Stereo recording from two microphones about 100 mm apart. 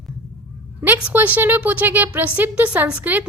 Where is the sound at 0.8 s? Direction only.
15° right (ahead or behind).